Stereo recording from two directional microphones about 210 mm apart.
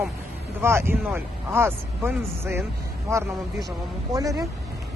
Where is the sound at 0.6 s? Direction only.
10° right (ahead or behind).